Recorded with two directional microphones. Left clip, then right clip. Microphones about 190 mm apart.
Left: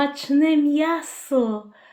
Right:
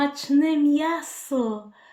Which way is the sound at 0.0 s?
Centre (ahead or behind).